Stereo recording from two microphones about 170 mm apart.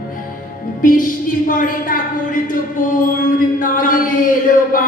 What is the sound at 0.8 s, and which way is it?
A woman's voice, 50° left (ahead or behind).